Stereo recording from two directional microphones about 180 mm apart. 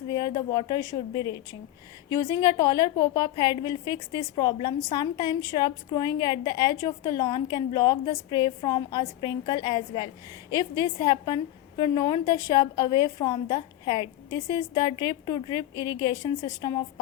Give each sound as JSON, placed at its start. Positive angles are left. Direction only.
{"t": 0.1, "sound": "a woman's voice", "side_deg": 20}